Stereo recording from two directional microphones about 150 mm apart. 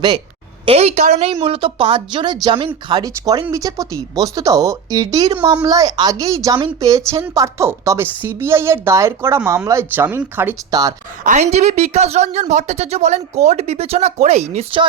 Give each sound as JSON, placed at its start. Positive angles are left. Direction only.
{"t": 0.6, "sound": "a woman's voice", "side_deg": -40}
{"t": 10.7, "sound": "speech", "side_deg": -25}
{"t": 11.2, "sound": "a woman's voice", "side_deg": -55}